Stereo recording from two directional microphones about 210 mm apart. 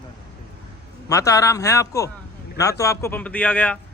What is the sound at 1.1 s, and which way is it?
A man's voice, 15° left (ahead or behind).